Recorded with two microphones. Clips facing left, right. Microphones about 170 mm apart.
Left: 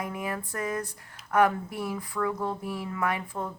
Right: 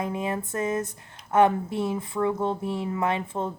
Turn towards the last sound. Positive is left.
turn(degrees=-25)  # may be behind; listen again after turning